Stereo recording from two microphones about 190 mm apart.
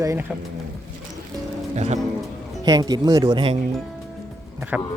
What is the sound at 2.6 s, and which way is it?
Speech, 20° right (ahead or behind).